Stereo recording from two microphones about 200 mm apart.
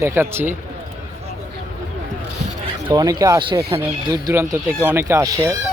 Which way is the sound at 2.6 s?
20° right (ahead or behind).